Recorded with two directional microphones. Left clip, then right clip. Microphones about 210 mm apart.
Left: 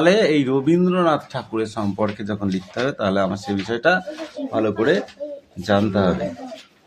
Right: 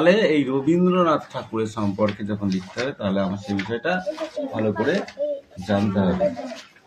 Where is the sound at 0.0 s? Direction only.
30° left (ahead or behind).